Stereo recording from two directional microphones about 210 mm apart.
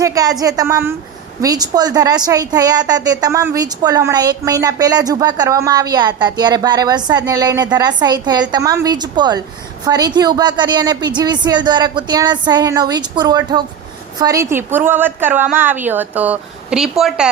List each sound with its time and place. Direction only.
0.0 s a woman's voice: 15° right (ahead or behind); by 17.2 s centre (ahead or behind)